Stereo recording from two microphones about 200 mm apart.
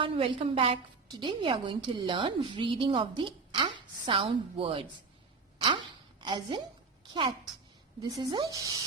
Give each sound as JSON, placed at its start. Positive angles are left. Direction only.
{"t": 0.0, "sound": "a woman's voice", "side_deg": -25}
{"t": 5.6, "sound": "chopping", "side_deg": -25}
{"t": 7.1, "sound": "a woman's voice", "side_deg": -25}